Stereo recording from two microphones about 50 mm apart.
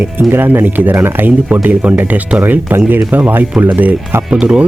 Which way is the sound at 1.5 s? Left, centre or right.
Right.